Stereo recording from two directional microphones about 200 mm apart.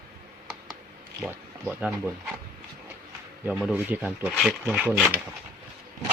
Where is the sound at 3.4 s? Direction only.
5° right (ahead or behind).